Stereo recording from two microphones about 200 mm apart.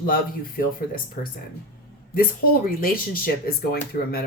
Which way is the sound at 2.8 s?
45° left (ahead or behind).